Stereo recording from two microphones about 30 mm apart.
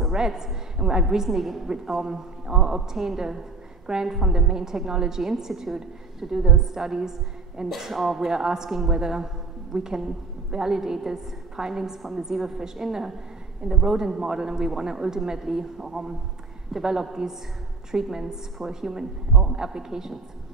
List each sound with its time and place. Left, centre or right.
0.1 s a woman's voice: centre
6.3 s a woman's voice: centre
7.6 s speech: centre
8.3 s a woman's voice: centre